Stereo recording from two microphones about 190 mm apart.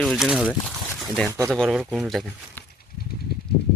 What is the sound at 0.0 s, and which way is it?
Speech, centre (ahead or behind).